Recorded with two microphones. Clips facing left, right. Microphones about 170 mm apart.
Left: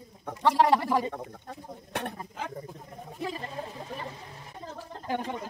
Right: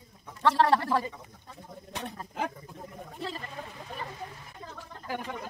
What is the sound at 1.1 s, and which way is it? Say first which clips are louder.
Speech: left 9 dB; 60° left (ahead or behind).